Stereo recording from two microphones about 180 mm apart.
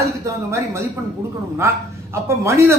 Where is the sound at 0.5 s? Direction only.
15° right (ahead or behind).